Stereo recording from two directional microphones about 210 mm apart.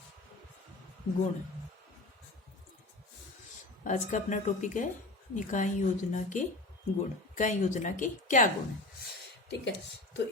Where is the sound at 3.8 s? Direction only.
35° left (ahead or behind).